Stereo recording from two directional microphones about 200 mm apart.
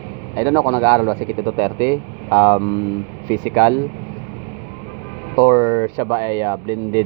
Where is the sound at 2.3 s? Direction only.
25° left (ahead or behind).